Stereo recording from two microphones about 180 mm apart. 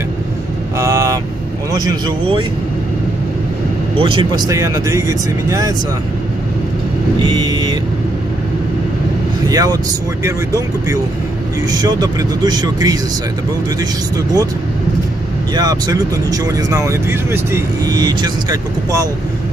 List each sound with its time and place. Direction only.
0.7 s vehicle: 15° right (ahead or behind)
1.7 s speech: 20° right (ahead or behind)
4.0 s speech: 25° right (ahead or behind)
7.2 s vehicle: 25° right (ahead or behind)
9.5 s speech: 20° right (ahead or behind)
15.5 s speech: 20° right (ahead or behind)